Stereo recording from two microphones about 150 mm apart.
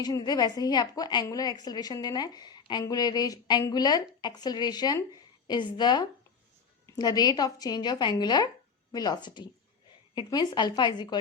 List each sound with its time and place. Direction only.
0.0 s a woman's voice: 25° left (ahead or behind)